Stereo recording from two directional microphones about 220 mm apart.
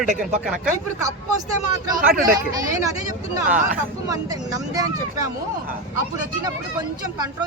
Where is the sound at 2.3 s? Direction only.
15° right (ahead or behind).